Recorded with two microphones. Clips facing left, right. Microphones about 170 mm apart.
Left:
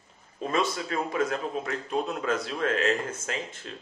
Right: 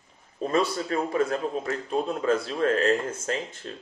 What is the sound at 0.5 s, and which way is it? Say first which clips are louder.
A man's voice: right 3 dB; 35° right (ahead or behind).